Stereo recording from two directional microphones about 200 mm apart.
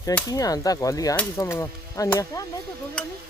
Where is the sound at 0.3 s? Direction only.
20° left (ahead or behind).